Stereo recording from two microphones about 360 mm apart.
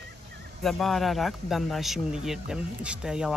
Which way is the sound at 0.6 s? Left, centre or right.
Centre.